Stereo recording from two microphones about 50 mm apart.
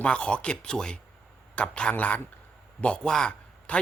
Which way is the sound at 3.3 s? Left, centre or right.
Left.